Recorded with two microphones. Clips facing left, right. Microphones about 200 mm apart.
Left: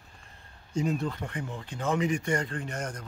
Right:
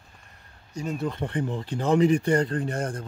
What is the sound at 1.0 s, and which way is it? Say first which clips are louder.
Speech: right 6 dB; 25° right (ahead or behind).